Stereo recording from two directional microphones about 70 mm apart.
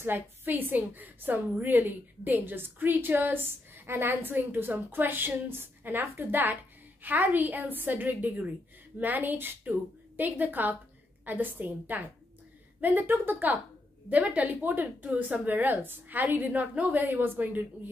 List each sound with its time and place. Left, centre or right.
0.0 s a woman's voice: right